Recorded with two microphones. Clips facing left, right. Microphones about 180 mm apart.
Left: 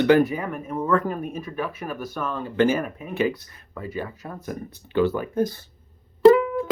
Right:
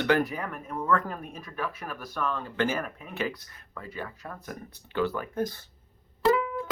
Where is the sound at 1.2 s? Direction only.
5° left (ahead or behind).